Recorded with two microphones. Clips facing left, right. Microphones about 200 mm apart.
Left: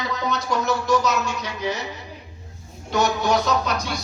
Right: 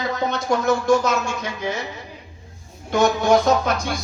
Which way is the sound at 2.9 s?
50° right (ahead or behind).